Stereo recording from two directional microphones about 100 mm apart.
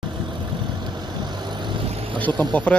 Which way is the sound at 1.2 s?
45° right (ahead or behind).